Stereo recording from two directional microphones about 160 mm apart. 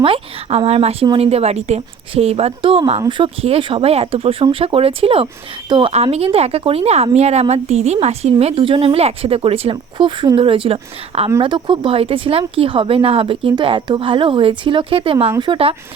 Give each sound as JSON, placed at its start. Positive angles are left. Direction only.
{"t": 0.0, "sound": "speech", "side_deg": -35}